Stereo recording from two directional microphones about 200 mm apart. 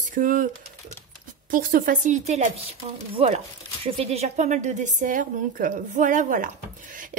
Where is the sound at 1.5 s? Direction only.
45° right (ahead or behind).